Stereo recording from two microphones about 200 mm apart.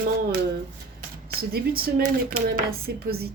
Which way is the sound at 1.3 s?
50° right (ahead or behind).